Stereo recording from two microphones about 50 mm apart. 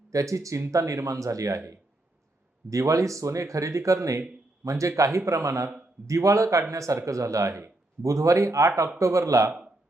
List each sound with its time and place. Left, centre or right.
0.1 s speech: right